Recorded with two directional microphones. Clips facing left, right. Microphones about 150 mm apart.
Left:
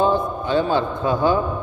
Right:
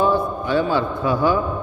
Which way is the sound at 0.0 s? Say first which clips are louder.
Even; 20° left (ahead or behind).